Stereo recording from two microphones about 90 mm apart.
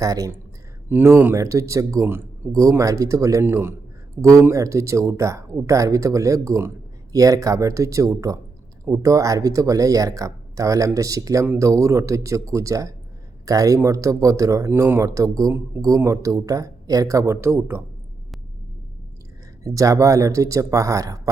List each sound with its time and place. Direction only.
0.0 s speech: 40° right (ahead or behind)
0.9 s speech: 25° right (ahead or behind)
2.0 s speech: 25° right (ahead or behind)
2.5 s speech: 40° right (ahead or behind)
3.4 s a man's voice: 25° right (ahead or behind)
4.2 s speech: 35° right (ahead or behind)
19.6 s speech: 40° right (ahead or behind)